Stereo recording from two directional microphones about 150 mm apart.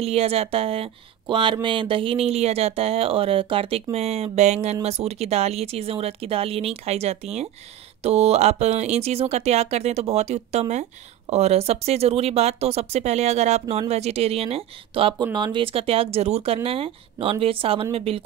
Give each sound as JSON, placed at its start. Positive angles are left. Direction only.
{"t": 0.0, "sound": "speech", "side_deg": -40}